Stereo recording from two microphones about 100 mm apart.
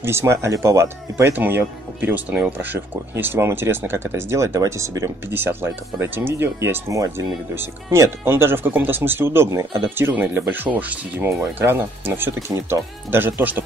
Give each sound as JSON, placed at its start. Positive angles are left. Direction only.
{"t": 0.0, "sound": "speech", "side_deg": -25}